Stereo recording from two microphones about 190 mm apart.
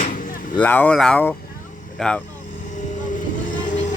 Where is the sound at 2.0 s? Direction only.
5° left (ahead or behind).